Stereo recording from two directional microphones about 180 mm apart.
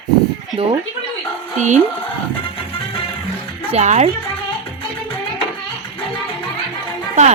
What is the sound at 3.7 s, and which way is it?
Speech, 40° right (ahead or behind).